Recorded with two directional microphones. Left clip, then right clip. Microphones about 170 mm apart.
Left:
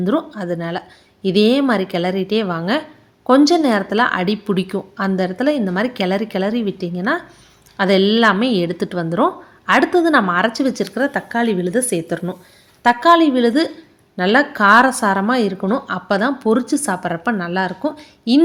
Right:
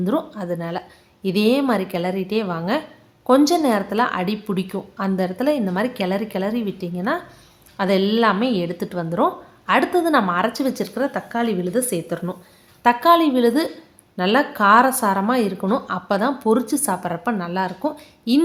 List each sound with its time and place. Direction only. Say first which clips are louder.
0.0 s a woman's voice: left 3 dB; 15° left (ahead or behind)